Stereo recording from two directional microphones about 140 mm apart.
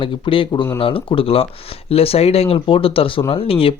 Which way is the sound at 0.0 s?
40° left (ahead or behind).